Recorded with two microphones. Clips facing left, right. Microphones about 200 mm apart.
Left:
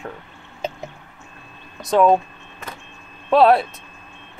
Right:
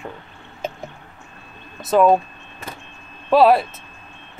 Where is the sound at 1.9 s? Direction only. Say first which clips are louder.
Right 1 dB; 5° right (ahead or behind).